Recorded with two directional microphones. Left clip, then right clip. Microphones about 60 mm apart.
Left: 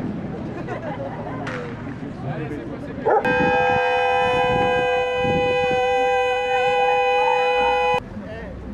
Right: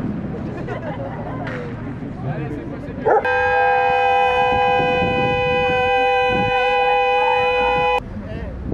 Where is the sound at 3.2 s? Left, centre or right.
Centre.